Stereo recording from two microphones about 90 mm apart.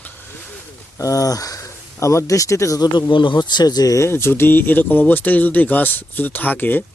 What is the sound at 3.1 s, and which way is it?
Speech, 60° left (ahead or behind).